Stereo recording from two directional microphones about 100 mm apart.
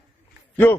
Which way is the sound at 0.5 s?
20° left (ahead or behind).